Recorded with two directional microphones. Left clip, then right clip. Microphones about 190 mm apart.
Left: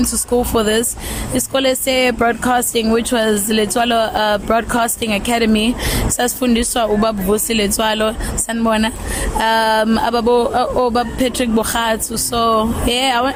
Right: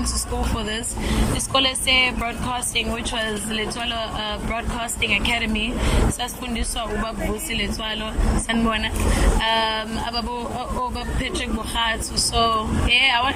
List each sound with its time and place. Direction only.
1.4 s speech: 45° left (ahead or behind)